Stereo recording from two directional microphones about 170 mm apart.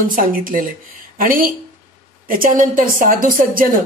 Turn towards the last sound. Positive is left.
turn(degrees=-55)  # may be behind; listen again after turning